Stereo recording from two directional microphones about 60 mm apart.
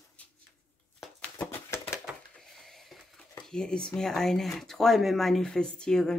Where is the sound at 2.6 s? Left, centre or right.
Centre.